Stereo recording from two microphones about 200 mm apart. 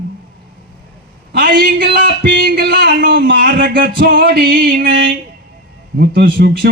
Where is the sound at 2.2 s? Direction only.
50° right (ahead or behind).